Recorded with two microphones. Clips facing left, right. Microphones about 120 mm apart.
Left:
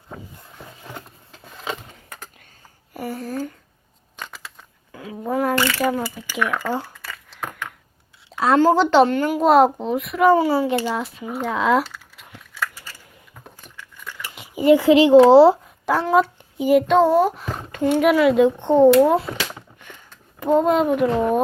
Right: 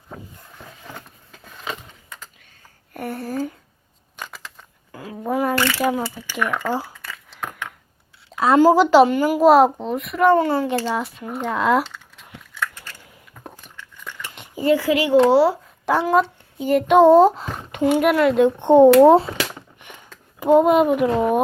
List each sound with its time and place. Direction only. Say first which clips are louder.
0.9 s a sound: left 2 dB; 25° left (ahead or behind)
2.9 s speech: right 1 dB; centre (ahead or behind)
4.2 s crumpling: right 1 dB; centre (ahead or behind)
6.3 s a sound: even; centre (ahead or behind)
8.3 s a woman's voice: right 2 dB; centre (ahead or behind)
10.9 s crumpling: right 1 dB; centre (ahead or behind)
13.7 s dog: even; 5° left (ahead or behind)
14.5 s speech: left 5 dB; 15° left (ahead or behind)
15.9 s a woman's voice: even; centre (ahead or behind)
16.6 s child singing: left 3 dB; 10° left (ahead or behind)
16.8 s a child's voice: right 4 dB; 15° right (ahead or behind)
17.9 s a woman's voice: left 2 dB; centre (ahead or behind)
18.6 s speech: right 6 dB; 15° right (ahead or behind)
20.4 s a woman's voice: right 3 dB; 5° right (ahead or behind)